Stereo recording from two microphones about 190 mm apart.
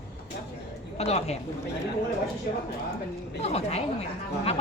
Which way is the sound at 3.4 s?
35° left (ahead or behind).